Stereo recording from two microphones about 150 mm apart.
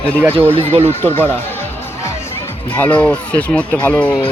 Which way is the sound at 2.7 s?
10° left (ahead or behind).